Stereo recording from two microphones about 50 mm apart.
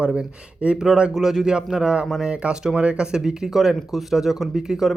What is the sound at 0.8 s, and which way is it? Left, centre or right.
Speech, centre.